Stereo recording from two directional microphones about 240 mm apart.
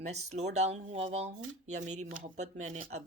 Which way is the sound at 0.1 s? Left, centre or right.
Right.